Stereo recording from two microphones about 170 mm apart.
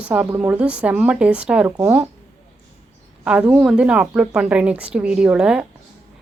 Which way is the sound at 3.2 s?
5° right (ahead or behind).